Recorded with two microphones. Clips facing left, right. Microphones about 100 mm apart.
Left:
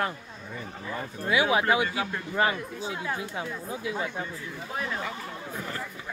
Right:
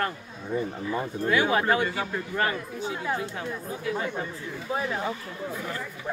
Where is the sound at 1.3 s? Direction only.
10° left (ahead or behind).